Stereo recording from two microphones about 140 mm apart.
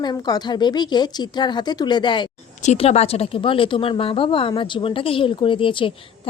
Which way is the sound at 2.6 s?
50° left (ahead or behind).